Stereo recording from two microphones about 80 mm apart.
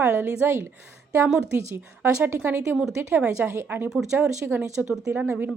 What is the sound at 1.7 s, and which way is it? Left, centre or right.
Speech, right.